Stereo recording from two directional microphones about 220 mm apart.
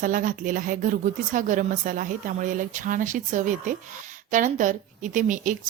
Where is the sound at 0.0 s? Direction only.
35° right (ahead or behind).